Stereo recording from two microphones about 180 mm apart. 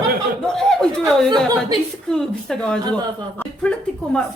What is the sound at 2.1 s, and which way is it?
Speech, 5° left (ahead or behind).